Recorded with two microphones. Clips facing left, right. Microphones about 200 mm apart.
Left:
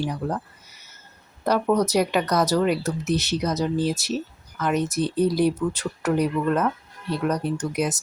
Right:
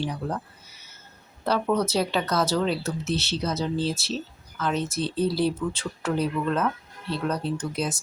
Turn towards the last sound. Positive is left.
turn(degrees=15)  # may be behind; listen again after turning